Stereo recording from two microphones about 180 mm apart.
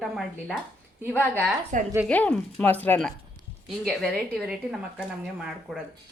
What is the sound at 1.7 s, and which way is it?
Speech, 45° right (ahead or behind).